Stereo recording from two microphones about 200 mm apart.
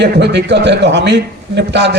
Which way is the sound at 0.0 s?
60° right (ahead or behind).